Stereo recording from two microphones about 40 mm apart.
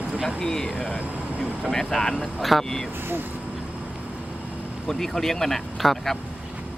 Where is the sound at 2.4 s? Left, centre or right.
Centre.